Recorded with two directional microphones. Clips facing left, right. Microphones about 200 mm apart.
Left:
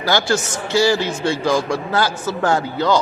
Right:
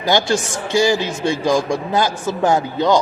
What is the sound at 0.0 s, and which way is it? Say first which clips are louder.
A man's voice: right 1 dB; 20° right (ahead or behind).